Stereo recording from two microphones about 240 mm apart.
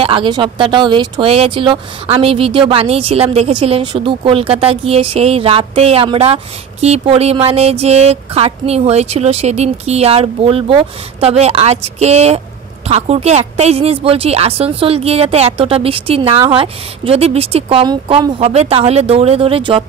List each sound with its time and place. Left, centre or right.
0.0 s speech: right